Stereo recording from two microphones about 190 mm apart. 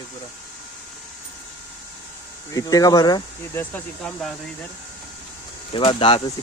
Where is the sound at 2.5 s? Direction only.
20° left (ahead or behind).